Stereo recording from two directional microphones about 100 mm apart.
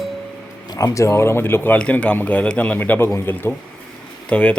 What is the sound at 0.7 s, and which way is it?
Speech, 35° left (ahead or behind).